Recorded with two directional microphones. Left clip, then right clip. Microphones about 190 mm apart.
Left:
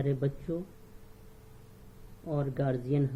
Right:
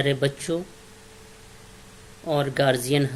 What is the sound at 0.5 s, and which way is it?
Speech, 35° right (ahead or behind).